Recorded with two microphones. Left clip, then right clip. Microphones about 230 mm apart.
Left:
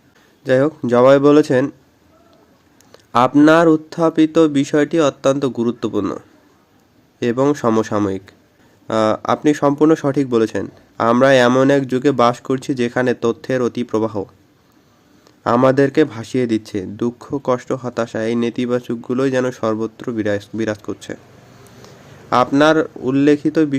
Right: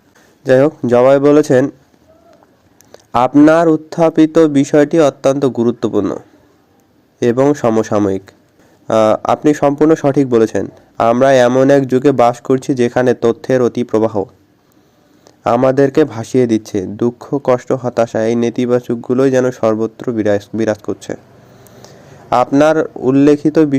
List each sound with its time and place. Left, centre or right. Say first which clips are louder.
0.4 s speech: right 5 dB; centre
2.9 s speech: right 2 dB; centre
15.4 s speech: right 3 dB; centre
22.3 s speech: right 3 dB; centre